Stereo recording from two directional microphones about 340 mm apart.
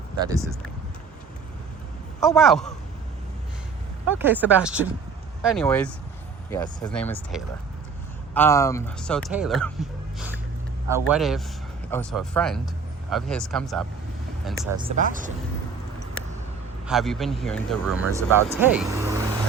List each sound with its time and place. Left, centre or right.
0.2 s speech: centre
2.2 s speech: centre
4.2 s speech: centre
10.2 s gasp: centre
10.8 s speech: centre
14.8 s speech: centre
16.8 s speech: centre